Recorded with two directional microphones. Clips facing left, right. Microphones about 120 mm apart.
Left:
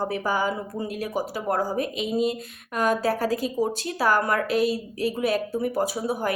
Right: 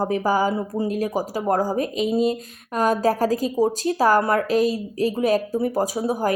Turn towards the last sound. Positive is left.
turn(degrees=-40)  # may be behind; listen again after turning